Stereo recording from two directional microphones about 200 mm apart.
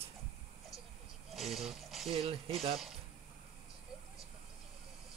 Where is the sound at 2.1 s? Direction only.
30° right (ahead or behind).